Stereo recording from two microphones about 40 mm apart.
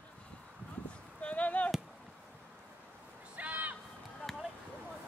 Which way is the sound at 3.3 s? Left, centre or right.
Right.